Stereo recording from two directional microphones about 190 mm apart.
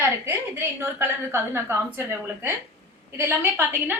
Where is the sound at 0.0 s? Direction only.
10° right (ahead or behind).